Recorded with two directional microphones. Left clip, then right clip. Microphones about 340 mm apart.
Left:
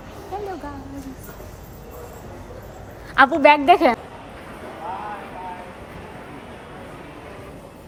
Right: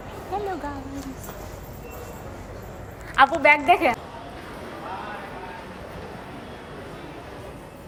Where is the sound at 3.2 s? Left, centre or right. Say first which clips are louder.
Left 3 dB; left.